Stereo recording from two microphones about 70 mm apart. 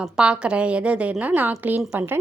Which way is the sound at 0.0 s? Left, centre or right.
Centre.